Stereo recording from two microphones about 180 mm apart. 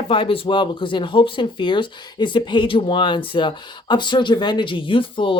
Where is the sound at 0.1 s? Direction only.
30° left (ahead or behind).